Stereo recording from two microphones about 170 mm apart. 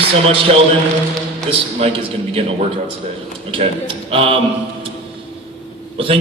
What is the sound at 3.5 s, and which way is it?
Speech, 30° right (ahead or behind).